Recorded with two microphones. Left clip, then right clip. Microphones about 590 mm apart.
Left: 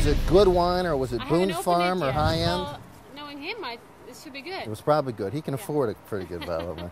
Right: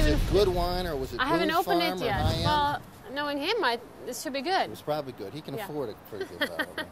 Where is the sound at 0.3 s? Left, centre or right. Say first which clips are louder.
Left 8 dB; left.